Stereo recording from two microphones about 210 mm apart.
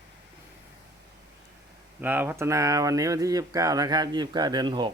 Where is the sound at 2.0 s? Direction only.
10° right (ahead or behind).